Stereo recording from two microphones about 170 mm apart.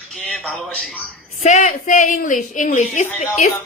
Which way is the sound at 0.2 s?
5° left (ahead or behind).